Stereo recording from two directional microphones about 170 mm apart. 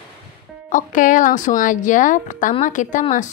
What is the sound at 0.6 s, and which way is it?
Speech, 50° left (ahead or behind).